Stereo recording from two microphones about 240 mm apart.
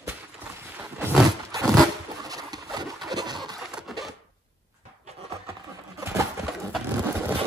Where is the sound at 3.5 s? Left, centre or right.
Centre.